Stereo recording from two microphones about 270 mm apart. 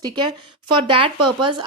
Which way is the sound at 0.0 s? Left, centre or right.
Centre.